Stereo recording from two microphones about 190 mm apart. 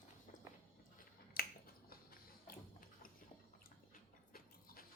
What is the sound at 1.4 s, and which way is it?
Finger snapping, 50° left (ahead or behind).